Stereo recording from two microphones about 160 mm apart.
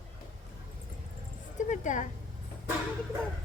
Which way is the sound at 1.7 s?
50° left (ahead or behind).